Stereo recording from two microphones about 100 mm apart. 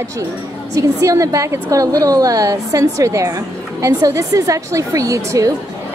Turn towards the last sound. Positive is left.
turn(degrees=-35)  # may be behind; listen again after turning